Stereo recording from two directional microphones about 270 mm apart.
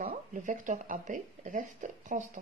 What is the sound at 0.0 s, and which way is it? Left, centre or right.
Speech, right.